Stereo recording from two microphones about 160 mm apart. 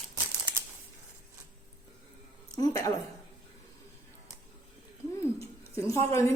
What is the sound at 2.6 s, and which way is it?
Speech, 20° left (ahead or behind).